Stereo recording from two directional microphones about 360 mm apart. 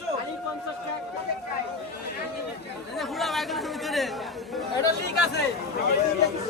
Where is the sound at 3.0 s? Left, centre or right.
Centre.